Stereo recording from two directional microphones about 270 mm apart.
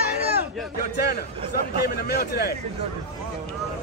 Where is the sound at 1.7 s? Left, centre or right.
Left.